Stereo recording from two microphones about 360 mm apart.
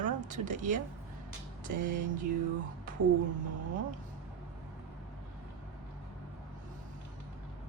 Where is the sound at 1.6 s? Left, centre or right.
Right.